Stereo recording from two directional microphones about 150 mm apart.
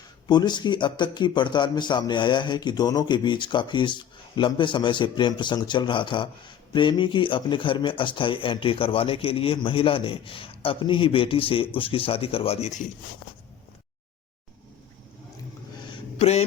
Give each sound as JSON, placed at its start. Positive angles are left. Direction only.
{"t": 0.3, "sound": "speech", "side_deg": 30}
{"t": 16.1, "sound": "speech", "side_deg": 45}